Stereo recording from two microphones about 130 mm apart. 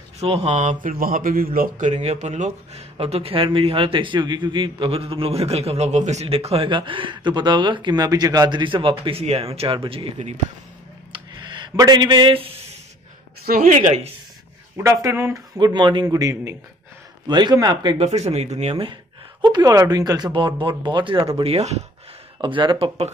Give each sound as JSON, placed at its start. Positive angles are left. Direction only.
{"t": 0.2, "sound": "speech", "side_deg": -55}
{"t": 6.2, "sound": "speech", "side_deg": -50}
{"t": 11.1, "sound": "a sound", "side_deg": -40}
{"t": 13.6, "sound": "a woman's voice", "side_deg": -75}
{"t": 14.8, "sound": "speech", "side_deg": -25}
{"t": 15.5, "sound": "speech", "side_deg": -35}
{"t": 17.9, "sound": "speech", "side_deg": -55}
{"t": 19.4, "sound": "speech", "side_deg": -30}
{"t": 22.4, "sound": "speech", "side_deg": -40}